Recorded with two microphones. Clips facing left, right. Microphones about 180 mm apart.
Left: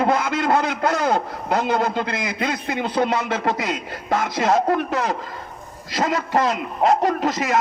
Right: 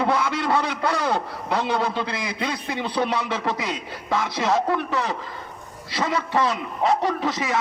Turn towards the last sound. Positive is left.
turn(degrees=45)  # may be behind; listen again after turning